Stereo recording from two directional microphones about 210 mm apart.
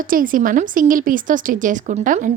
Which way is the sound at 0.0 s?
40° right (ahead or behind).